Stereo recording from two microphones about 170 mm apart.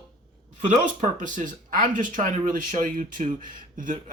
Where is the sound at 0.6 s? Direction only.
45° right (ahead or behind).